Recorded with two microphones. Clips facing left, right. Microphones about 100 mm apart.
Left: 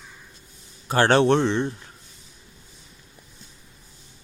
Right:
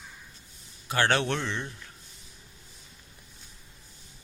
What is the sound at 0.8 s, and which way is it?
Speech, 35° left (ahead or behind).